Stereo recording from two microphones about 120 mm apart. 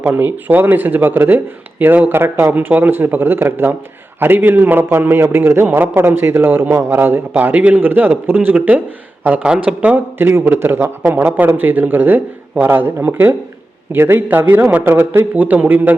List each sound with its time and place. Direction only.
0.0 s a man's voice: 15° right (ahead or behind)